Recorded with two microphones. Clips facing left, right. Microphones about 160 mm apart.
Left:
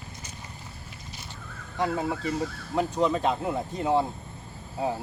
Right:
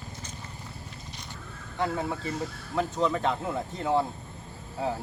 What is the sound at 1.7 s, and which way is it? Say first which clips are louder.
Speech: left 2 dB; 20° left (ahead or behind).